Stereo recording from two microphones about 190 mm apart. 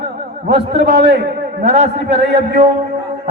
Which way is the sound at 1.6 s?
45° right (ahead or behind).